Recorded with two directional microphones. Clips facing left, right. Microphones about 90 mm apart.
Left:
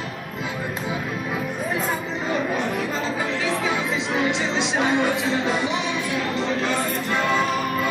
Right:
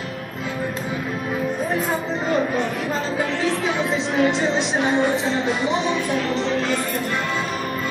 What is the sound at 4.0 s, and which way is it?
Music, 40° right (ahead or behind).